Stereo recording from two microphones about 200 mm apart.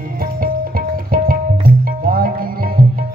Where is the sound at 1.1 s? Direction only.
45° right (ahead or behind).